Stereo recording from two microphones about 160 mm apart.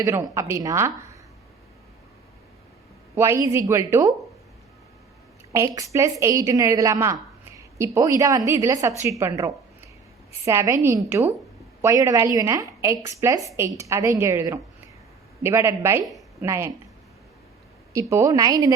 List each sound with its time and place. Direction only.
0.0 s a woman's voice: 20° right (ahead or behind)
3.2 s a woman's voice: 15° right (ahead or behind)
5.5 s a woman's voice: 20° right (ahead or behind)
17.9 s a woman's voice: 20° right (ahead or behind)